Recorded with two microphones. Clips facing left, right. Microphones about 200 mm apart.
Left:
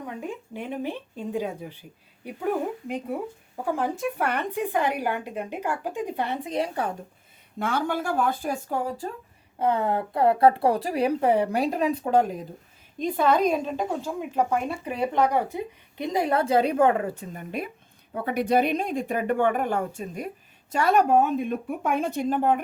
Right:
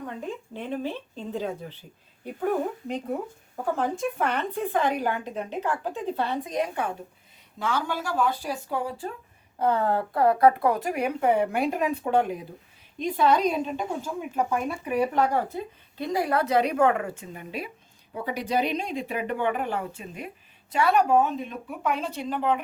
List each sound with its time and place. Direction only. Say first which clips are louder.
0.1 s a woman's voice: left 1 dB; 10° left (ahead or behind); by 6.9 s 35° left (ahead or behind)
7.6 s speech: left 2 dB; 55° left (ahead or behind)
9.6 s a woman's voice: even; 20° left (ahead or behind); by 12.4 s 40° left (ahead or behind)
13.0 s speech: left 1 dB; 50° left (ahead or behind)
14.0 s speech: left 2 dB; 30° left (ahead or behind)
17.3 s speech: left 3 dB; 50° left (ahead or behind)